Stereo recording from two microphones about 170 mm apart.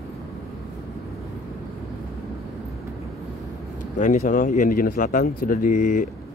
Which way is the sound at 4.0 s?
50° left (ahead or behind).